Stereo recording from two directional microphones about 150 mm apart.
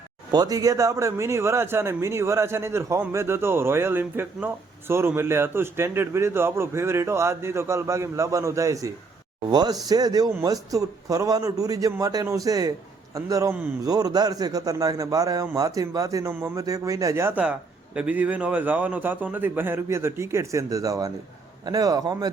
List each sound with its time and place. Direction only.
0.3 s a man's voice: 25° right (ahead or behind)